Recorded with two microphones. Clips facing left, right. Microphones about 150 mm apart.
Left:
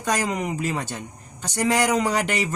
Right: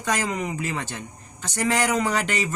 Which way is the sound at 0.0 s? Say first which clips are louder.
Left 1 dB; 10° left (ahead or behind).